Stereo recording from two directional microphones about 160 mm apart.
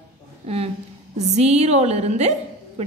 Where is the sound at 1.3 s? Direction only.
40° right (ahead or behind).